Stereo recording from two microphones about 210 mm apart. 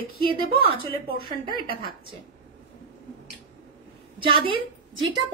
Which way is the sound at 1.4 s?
25° right (ahead or behind).